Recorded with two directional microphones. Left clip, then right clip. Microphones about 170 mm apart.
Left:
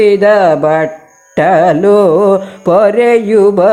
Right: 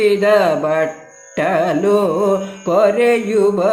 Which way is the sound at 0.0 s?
40° left (ahead or behind).